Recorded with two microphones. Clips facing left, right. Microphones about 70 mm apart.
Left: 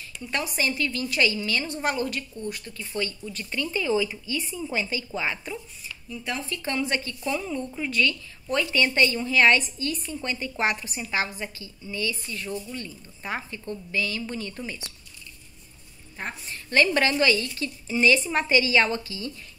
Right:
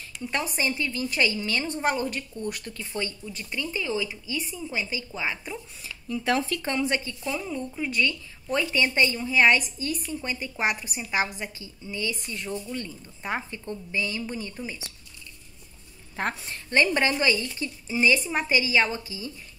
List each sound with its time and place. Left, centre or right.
0.3 s a woman's voice: right
2.4 s speech: right
2.9 s a woman's voice: right
3.3 s a woman's voice: centre
6.0 s speech: right
6.6 s a woman's voice: right
7.2 s a woman's voice: centre
16.9 s a woman's voice: right